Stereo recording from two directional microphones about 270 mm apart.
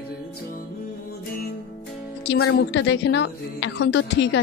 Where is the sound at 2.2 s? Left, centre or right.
Left.